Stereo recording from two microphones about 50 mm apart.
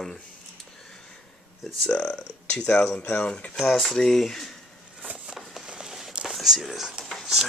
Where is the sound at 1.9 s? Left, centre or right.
Left.